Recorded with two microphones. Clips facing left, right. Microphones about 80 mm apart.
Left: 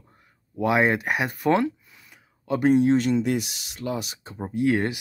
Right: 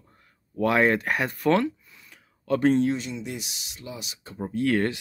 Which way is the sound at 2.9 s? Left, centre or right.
Left.